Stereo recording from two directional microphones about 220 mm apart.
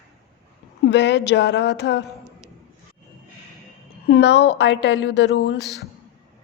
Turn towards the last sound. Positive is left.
turn(degrees=55)  # may be behind; listen again after turning